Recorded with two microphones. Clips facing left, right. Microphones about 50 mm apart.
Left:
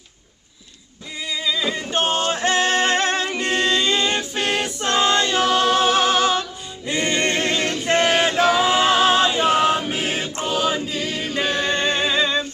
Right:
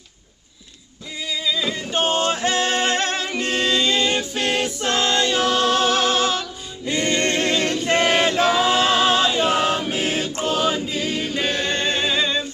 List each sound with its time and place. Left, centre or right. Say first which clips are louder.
1.3 s music: left 1 dB; centre
2.0 s music: right 1 dB; left
4.3 s choir: even; centre
6.9 s a capella: even; left
7.9 s choir: left 1 dB; centre
10.6 s choir: even; centre
11.5 s music: left 2 dB; centre